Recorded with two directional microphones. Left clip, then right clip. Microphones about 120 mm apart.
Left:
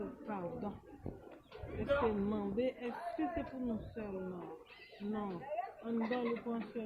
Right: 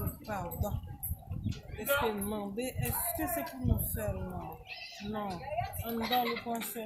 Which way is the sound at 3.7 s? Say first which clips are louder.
Right 4 dB; 45° right (ahead or behind).